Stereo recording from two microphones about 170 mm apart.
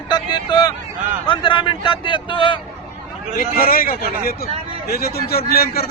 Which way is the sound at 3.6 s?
60° left (ahead or behind).